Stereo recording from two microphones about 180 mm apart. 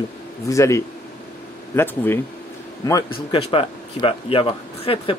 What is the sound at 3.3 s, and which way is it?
Speech, 30° left (ahead or behind).